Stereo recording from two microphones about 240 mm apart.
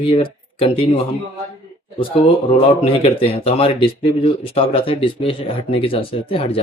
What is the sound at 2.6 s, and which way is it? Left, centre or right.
Speech, left.